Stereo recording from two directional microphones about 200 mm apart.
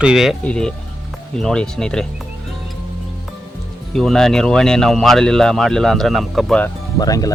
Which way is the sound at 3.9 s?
Centre (ahead or behind).